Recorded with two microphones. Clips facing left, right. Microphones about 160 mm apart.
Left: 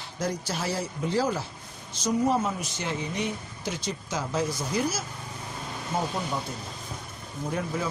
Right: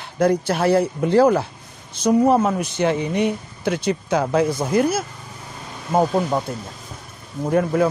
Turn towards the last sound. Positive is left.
turn(degrees=-60)  # may be behind; listen again after turning